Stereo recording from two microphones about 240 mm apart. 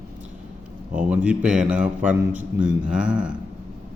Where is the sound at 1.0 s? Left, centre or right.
Centre.